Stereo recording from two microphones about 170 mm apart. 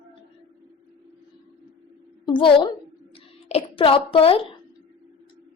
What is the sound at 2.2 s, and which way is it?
A woman's voice, 25° left (ahead or behind).